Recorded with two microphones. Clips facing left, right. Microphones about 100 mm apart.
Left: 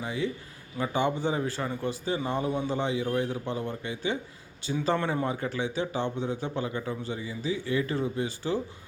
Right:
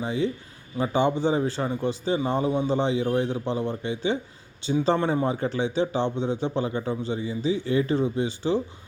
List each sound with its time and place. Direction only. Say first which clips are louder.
0.0 s a man's voice: right 5 dB; 25° right (ahead or behind)